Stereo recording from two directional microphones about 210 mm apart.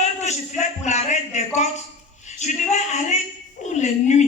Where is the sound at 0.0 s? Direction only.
30° left (ahead or behind).